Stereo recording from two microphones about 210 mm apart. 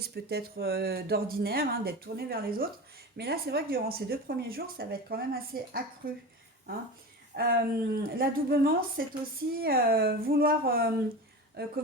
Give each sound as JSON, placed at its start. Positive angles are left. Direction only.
{"t": 0.0, "sound": "speech", "side_deg": -50}
{"t": 7.3, "sound": "speech", "side_deg": -45}